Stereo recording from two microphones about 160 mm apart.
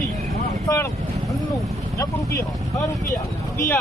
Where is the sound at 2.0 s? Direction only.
20° left (ahead or behind).